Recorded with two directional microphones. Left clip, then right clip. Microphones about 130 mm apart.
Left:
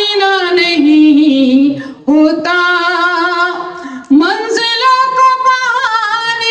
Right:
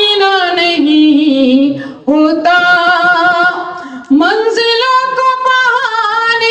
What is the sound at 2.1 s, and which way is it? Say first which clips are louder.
Singing: right 1 dB; 40° right (ahead or behind).